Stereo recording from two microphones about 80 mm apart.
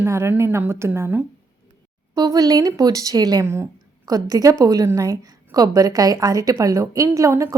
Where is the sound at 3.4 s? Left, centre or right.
Right.